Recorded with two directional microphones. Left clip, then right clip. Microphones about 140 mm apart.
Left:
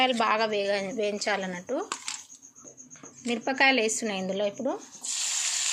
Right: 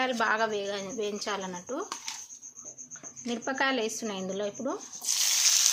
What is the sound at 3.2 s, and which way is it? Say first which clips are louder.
Speech: left 6 dB; 15° left (ahead or behind).